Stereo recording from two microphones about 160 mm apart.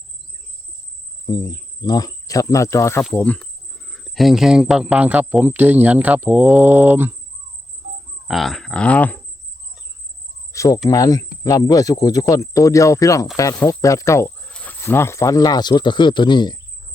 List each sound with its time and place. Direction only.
1.3 s speech: 25° left (ahead or behind)
3.0 s speech: 5° left (ahead or behind); by 7.1 s 10° right (ahead or behind)
8.3 s speech: centre (ahead or behind)
10.5 s cricket: 20° left (ahead or behind)
10.8 s speech: 20° left (ahead or behind)